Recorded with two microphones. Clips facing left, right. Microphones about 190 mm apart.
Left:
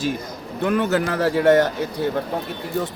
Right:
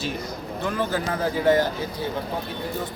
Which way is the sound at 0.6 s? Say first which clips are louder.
Left 6 dB; 65° left (ahead or behind).